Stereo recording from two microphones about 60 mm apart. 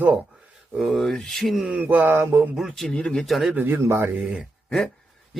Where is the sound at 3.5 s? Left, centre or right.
Right.